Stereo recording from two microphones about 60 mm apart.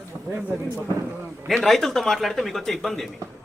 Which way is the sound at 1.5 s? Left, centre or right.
Centre.